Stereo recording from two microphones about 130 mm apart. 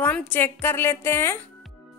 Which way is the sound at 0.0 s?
15° left (ahead or behind).